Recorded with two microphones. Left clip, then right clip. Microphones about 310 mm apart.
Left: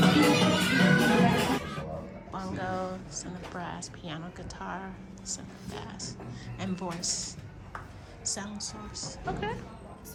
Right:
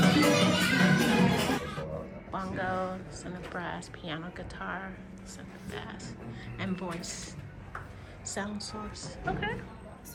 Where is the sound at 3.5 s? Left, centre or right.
Centre.